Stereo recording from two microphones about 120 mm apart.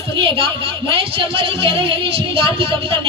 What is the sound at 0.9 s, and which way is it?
A woman's voice, 50° right (ahead or behind).